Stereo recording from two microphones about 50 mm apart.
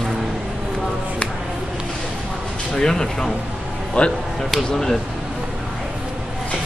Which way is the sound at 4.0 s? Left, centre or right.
Left.